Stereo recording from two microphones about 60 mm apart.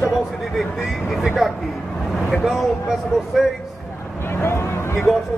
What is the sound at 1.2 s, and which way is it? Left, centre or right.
Speech, centre.